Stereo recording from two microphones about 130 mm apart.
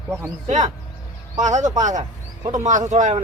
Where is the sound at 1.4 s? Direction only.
70° right (ahead or behind).